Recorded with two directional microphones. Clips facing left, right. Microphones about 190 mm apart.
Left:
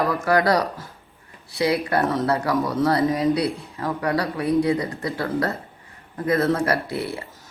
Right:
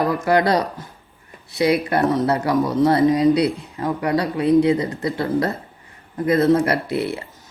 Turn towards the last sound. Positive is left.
turn(degrees=-25)  # may be behind; listen again after turning